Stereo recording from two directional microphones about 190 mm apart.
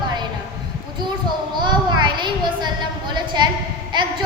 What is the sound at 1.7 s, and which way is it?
A child's voice, 25° right (ahead or behind).